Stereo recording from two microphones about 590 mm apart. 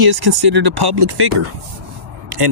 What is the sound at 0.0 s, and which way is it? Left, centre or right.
Speech, right.